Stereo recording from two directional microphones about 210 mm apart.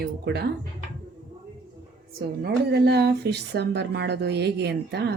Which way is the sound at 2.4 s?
50° right (ahead or behind).